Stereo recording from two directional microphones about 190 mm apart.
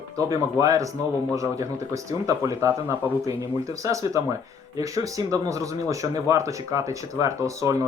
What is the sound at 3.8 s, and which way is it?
Speech, 15° right (ahead or behind).